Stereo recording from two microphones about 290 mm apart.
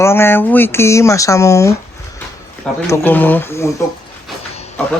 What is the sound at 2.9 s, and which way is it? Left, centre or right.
Speech, centre.